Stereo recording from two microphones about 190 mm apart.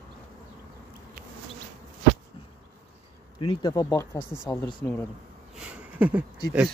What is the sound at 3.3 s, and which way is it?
Speech, 25° left (ahead or behind).